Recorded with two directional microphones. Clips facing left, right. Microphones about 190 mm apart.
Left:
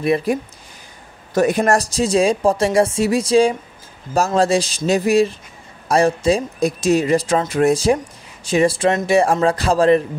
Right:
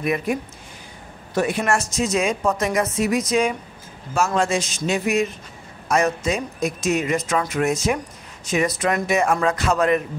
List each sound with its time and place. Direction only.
0.0 s a woman's voice: 35° left (ahead or behind)